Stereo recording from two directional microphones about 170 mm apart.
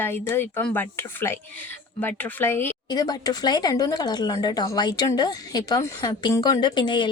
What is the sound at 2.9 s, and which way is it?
Speech, 25° left (ahead or behind).